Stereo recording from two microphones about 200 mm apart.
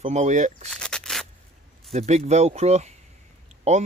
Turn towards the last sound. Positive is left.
turn(degrees=-35)  # may be behind; listen again after turning